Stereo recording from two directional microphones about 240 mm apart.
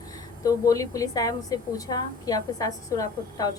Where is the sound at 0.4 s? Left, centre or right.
Centre.